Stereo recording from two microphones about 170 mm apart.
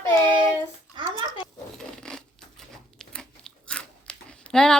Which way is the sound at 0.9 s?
25° right (ahead or behind).